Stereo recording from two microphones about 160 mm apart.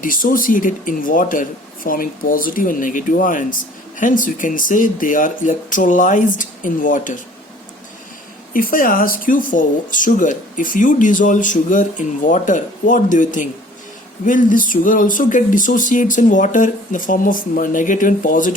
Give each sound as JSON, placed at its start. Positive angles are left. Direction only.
{"t": 0.0, "sound": "speech", "side_deg": 60}
{"t": 8.5, "sound": "speech", "side_deg": 60}